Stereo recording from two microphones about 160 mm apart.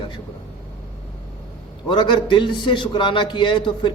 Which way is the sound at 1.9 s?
30° left (ahead or behind).